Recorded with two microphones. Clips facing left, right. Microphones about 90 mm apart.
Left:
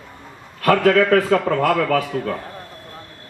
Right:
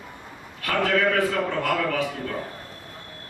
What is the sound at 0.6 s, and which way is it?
A man's voice, 55° left (ahead or behind).